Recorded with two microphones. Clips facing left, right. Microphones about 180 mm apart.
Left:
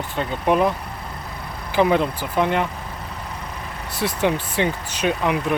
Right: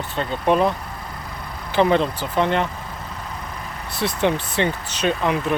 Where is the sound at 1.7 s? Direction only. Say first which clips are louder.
Even; 10° left (ahead or behind).